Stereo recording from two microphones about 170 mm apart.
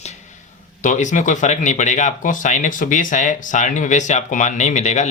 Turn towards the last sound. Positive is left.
turn(degrees=40)  # may be behind; listen again after turning